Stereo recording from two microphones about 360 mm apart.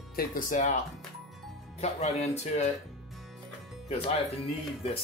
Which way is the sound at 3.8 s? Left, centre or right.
Centre.